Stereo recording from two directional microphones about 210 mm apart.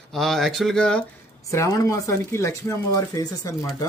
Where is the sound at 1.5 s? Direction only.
15° left (ahead or behind).